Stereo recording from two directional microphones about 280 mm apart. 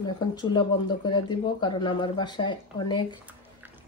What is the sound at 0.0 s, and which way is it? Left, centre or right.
Speech, centre.